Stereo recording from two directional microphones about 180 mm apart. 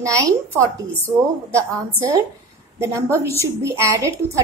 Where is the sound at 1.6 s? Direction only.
15° right (ahead or behind).